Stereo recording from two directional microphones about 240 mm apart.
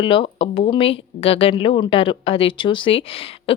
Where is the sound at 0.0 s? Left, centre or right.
Left.